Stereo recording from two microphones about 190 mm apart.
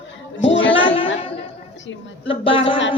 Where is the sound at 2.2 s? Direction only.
30° left (ahead or behind).